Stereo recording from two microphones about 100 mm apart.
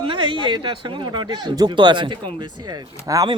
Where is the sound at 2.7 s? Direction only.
35° right (ahead or behind).